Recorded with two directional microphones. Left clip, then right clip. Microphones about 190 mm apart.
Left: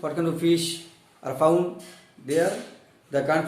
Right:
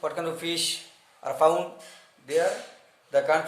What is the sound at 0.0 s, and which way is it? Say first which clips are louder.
A man's voice: left 4 dB; 25° right (ahead or behind).